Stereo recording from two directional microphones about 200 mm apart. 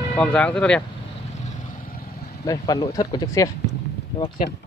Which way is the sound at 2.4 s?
20° left (ahead or behind).